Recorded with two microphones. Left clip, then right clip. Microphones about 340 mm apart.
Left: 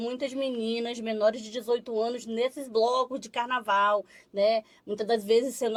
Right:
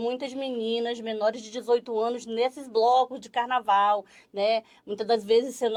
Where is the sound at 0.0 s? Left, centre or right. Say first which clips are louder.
Right 1 dB; left.